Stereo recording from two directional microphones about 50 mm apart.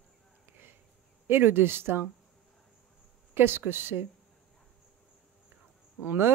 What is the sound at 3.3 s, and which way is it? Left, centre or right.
Speech, right.